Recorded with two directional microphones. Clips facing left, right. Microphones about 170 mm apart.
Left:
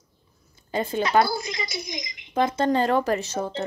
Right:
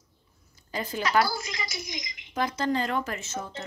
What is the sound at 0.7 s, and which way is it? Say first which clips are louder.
A woman's voice: left 5 dB; 25° left (ahead or behind).